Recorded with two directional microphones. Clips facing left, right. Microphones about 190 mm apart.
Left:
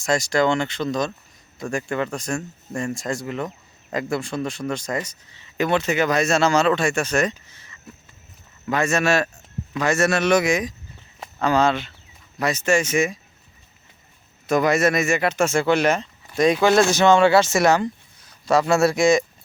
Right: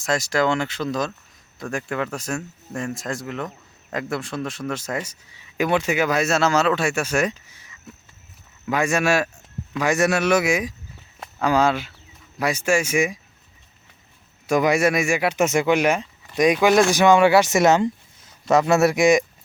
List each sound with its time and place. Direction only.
0.0 s speech: centre (ahead or behind)
14.4 s speech: 10° right (ahead or behind)